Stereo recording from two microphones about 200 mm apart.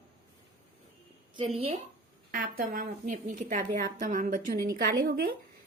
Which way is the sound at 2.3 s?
45° right (ahead or behind).